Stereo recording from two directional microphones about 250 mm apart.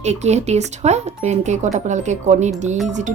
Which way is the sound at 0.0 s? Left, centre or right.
Right.